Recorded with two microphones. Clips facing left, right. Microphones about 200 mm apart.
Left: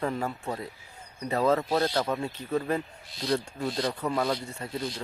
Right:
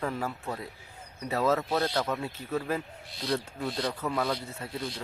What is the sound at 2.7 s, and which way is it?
Speech, 5° right (ahead or behind).